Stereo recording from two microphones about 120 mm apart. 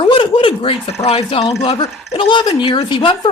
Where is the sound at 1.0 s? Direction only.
60° left (ahead or behind).